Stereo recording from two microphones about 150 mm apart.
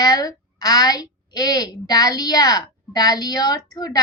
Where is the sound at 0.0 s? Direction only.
25° left (ahead or behind).